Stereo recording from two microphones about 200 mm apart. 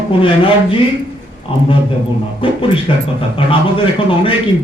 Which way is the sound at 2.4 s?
25° left (ahead or behind).